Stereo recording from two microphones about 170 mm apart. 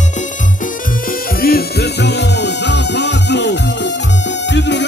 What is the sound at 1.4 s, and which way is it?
Music, 65° left (ahead or behind).